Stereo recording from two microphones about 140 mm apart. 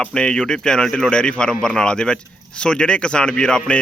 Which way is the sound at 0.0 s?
5° left (ahead or behind).